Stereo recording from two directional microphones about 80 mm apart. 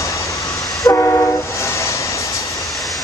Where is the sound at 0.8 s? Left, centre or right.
Left.